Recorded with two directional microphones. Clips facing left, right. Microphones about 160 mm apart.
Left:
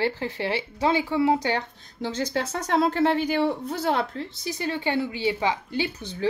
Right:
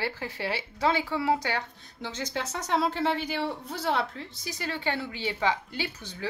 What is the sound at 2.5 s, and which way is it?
Speech, 55° left (ahead or behind).